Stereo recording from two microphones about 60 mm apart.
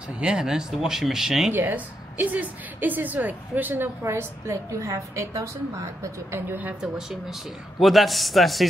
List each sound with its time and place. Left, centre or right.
0.2 s speech: centre
1.5 s a woman's voice: right
4.0 s a woman's voice: right
6.3 s a woman's voice: right
6.8 s speech: centre